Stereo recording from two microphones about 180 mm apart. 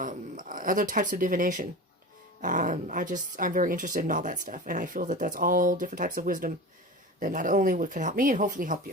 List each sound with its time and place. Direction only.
0.0 s speech: 45° right (ahead or behind)